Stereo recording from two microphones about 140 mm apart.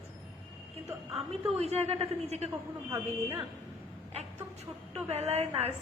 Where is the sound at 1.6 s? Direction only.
50° right (ahead or behind).